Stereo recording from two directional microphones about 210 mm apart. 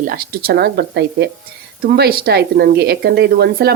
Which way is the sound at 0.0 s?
45° right (ahead or behind).